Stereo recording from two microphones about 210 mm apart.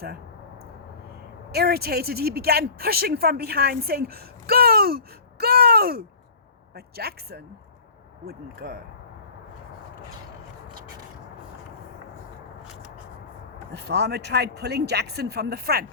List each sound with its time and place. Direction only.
1.5 s speech: 50° right (ahead or behind)
13.8 s speech: 50° right (ahead or behind)